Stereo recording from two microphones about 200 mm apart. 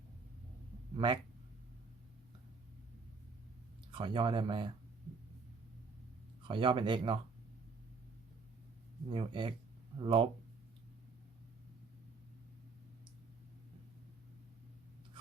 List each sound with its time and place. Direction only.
0.9 s speech: 25° right (ahead or behind)
3.9 s speech: 25° right (ahead or behind)
6.5 s speech: 25° right (ahead or behind)
9.0 s speech: 25° right (ahead or behind)